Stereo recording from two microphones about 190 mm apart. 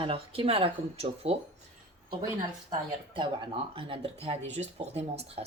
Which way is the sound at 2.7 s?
25° right (ahead or behind).